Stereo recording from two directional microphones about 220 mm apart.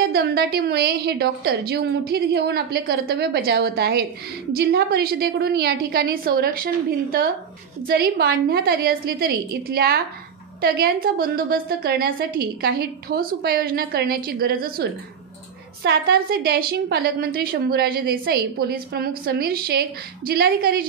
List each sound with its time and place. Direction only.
0.1 s a woman's voice: 45° right (ahead or behind)